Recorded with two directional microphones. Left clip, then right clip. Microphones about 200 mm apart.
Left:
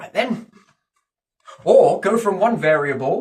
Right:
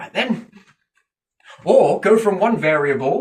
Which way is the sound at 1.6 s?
20° left (ahead or behind).